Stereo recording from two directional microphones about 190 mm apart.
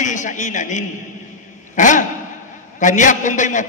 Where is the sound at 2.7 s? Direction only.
40° left (ahead or behind).